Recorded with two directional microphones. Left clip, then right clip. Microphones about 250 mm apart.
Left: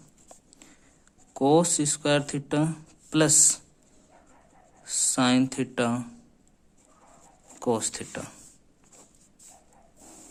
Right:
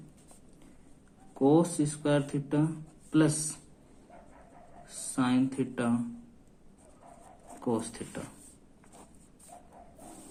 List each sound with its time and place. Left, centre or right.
1.3 s speech: left
5.1 s speech: left
7.6 s speech: left